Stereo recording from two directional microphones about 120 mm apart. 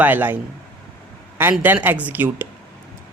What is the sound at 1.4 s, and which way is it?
Speech, 15° right (ahead or behind).